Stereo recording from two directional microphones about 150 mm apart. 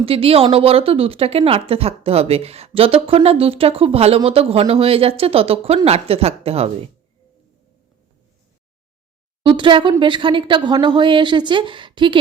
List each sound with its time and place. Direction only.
0.0 s speech: 40° right (ahead or behind)
9.4 s speech: 35° right (ahead or behind)